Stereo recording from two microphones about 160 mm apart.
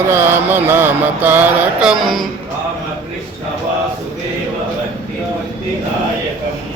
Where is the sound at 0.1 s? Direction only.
15° right (ahead or behind).